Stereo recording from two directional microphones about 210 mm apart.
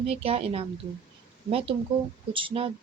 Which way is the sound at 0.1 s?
30° right (ahead or behind).